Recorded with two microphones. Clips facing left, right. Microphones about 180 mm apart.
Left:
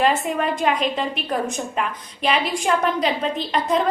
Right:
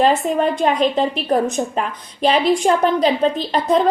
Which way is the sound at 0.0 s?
35° right (ahead or behind).